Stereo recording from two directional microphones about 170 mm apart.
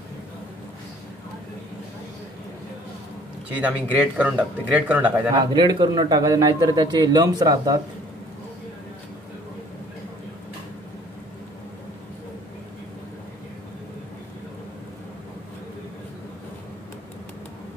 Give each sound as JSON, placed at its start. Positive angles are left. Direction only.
{"t": 3.5, "sound": "speech", "side_deg": -10}
{"t": 5.3, "sound": "speech", "side_deg": -25}